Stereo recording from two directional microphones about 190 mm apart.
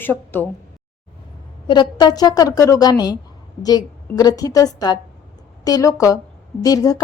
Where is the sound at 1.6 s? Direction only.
25° left (ahead or behind).